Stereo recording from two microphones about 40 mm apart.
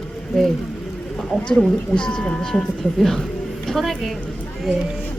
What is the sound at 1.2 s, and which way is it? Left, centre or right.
A woman's voice, centre.